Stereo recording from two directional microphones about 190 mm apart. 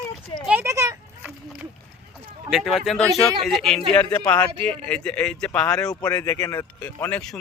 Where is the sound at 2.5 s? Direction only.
Centre (ahead or behind).